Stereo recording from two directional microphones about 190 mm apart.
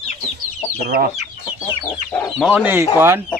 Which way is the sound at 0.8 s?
45° right (ahead or behind).